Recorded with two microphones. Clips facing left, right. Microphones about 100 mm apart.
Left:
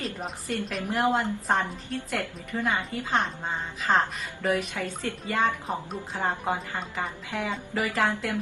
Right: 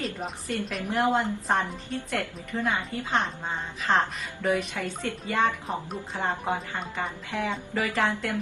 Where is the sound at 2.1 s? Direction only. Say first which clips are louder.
Right 1 dB; 15° left (ahead or behind).